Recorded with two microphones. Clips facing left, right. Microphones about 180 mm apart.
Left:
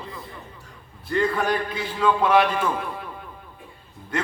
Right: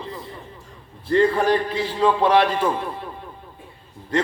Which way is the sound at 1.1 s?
30° right (ahead or behind).